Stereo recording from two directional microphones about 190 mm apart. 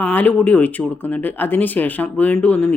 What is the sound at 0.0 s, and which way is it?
A woman's voice, 10° left (ahead or behind).